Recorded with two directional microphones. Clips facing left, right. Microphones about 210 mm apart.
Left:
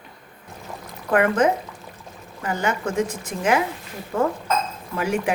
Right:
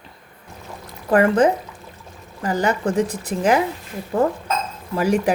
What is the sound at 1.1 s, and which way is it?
Speech, 35° right (ahead or behind).